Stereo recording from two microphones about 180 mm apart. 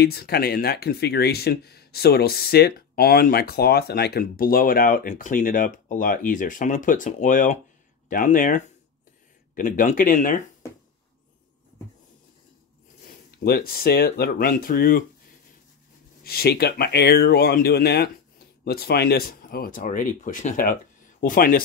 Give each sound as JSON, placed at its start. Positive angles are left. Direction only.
{"t": 0.0, "sound": "speech", "side_deg": 60}
{"t": 13.4, "sound": "speech", "side_deg": 60}
{"t": 16.3, "sound": "speech", "side_deg": 60}